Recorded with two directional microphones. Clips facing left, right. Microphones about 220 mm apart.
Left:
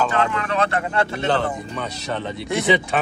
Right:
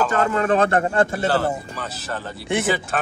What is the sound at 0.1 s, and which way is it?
Speech, 45° right (ahead or behind).